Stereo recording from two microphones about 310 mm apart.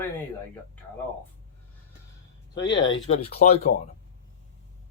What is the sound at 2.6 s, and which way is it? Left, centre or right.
Speech, left.